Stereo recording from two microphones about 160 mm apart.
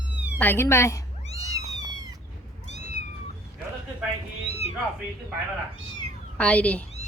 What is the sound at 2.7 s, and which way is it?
Cat, 45° left (ahead or behind).